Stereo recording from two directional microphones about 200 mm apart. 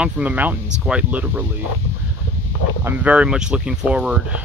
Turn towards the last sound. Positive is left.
turn(degrees=-5)  # may be behind; listen again after turning